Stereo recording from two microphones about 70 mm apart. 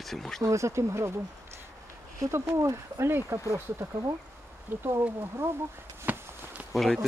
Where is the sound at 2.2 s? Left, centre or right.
Right.